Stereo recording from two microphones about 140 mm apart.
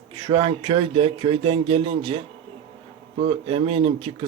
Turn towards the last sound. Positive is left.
turn(degrees=-40)  # may be behind; listen again after turning